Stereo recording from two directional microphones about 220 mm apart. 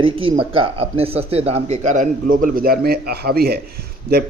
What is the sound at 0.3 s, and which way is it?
A man's voice, 25° right (ahead or behind).